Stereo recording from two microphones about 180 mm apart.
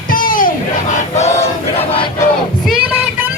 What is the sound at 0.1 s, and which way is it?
Crowd, 50° left (ahead or behind).